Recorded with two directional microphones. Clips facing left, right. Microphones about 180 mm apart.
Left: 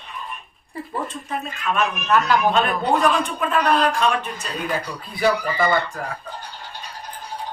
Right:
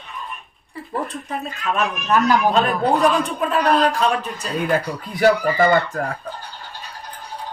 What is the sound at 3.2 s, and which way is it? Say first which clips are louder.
Speech: right 2 dB; 35° right (ahead or behind).